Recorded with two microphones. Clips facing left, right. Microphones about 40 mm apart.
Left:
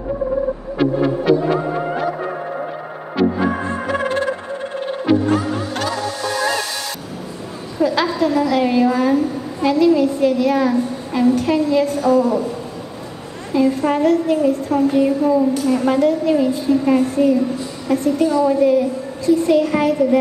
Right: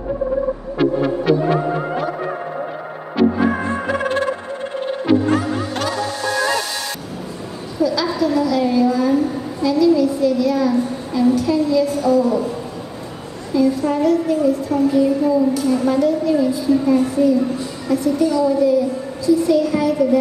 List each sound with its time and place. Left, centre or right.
0.8 s music: centre
3.2 s music: centre
5.1 s music: centre
7.8 s a woman's voice: left
13.5 s a woman's voice: left